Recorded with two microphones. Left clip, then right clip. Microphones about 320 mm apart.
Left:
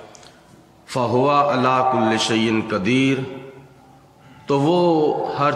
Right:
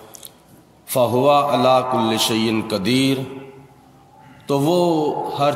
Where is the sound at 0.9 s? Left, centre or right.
Centre.